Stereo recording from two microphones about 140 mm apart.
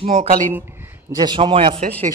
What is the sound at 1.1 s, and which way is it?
Speech, 35° right (ahead or behind).